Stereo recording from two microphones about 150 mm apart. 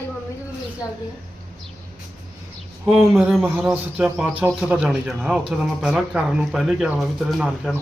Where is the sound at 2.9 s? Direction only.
5° right (ahead or behind).